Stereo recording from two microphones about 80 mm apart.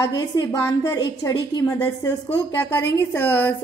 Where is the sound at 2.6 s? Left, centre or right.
Left.